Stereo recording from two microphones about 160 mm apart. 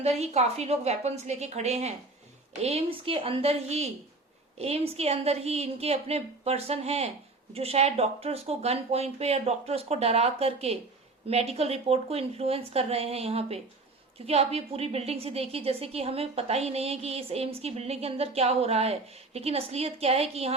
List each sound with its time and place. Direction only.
0.2 s a woman's voice: 40° right (ahead or behind)